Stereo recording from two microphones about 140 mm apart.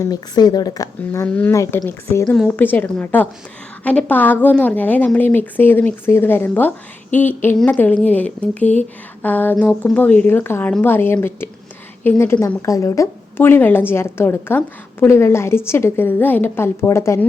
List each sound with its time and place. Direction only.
0.0 s speech: 30° left (ahead or behind)
1.3 s a woman's voice: 10° left (ahead or behind)
1.5 s a woman's voice: 20° left (ahead or behind)